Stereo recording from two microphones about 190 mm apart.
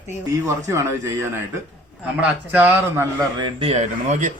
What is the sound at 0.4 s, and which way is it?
Speech, 15° right (ahead or behind).